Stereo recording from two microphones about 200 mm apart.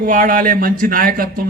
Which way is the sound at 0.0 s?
45° right (ahead or behind).